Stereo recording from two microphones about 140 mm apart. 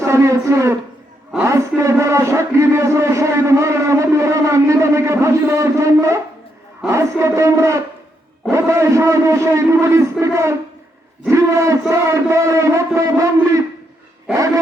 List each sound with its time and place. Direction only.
0.0 s a man's voice: 20° right (ahead or behind)